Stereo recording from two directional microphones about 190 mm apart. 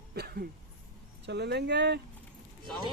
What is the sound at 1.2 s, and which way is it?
Speech, 65° right (ahead or behind).